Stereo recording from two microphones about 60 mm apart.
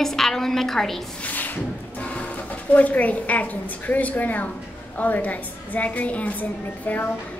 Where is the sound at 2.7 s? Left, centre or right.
Left.